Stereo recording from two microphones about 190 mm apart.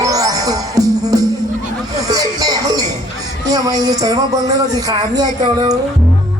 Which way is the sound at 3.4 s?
20° right (ahead or behind).